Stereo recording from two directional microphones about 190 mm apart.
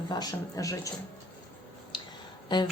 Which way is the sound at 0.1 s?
20° left (ahead or behind).